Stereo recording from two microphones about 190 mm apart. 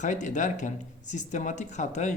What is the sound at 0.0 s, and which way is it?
Speech, 40° left (ahead or behind).